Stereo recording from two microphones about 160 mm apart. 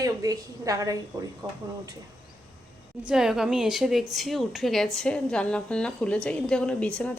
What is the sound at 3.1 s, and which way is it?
A woman's voice, 5° right (ahead or behind).